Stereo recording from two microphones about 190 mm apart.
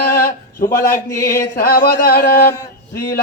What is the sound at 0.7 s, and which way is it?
Speech, 15° left (ahead or behind).